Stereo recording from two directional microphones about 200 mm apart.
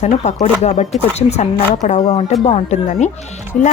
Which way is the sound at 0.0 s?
35° left (ahead or behind).